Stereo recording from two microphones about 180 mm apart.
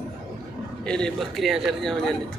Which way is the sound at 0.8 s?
5° left (ahead or behind).